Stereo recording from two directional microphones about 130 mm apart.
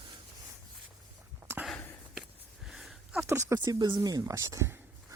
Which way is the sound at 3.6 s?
35° right (ahead or behind).